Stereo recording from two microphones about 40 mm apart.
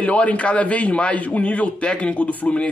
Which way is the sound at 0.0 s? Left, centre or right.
Left.